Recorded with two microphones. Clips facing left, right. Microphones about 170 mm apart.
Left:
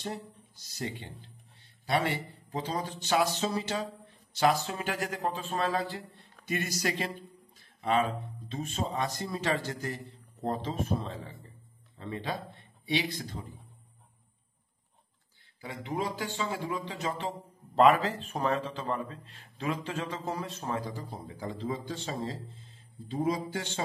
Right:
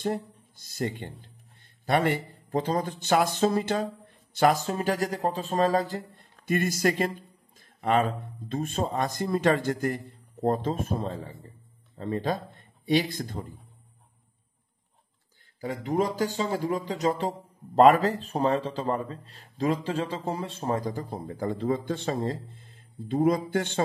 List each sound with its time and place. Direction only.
0.0 s speech: 50° right (ahead or behind)
15.6 s speech: 40° right (ahead or behind)
20.9 s a man's voice: 55° right (ahead or behind)